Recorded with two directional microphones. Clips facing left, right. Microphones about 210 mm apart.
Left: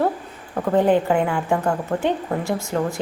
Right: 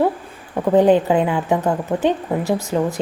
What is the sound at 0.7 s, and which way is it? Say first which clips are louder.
A woman's voice: right 4 dB; 15° right (ahead or behind).